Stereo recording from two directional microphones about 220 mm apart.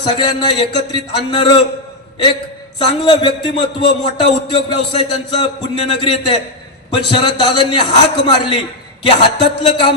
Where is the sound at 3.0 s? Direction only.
25° left (ahead or behind).